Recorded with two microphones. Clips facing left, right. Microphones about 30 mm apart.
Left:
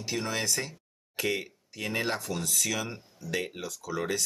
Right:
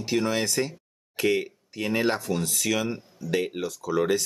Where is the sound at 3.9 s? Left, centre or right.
Right.